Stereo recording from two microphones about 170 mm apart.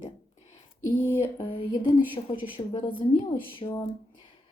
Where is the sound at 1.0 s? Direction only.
15° left (ahead or behind).